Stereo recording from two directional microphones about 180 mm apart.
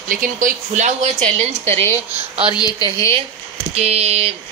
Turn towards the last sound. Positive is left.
turn(degrees=-35)  # may be behind; listen again after turning